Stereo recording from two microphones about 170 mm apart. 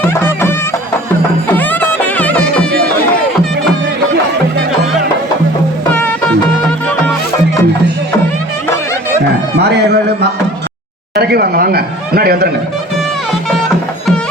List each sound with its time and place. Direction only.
1.5 s music: 10° left (ahead or behind)
5.9 s music: 5° left (ahead or behind)
9.6 s speech: 75° right (ahead or behind)